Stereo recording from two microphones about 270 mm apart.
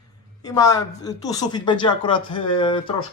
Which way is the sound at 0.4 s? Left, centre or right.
Centre.